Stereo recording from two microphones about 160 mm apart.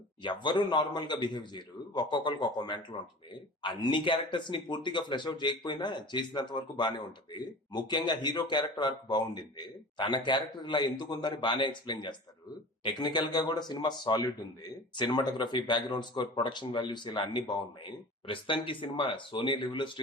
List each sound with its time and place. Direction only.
0.2 s speech: 30° left (ahead or behind)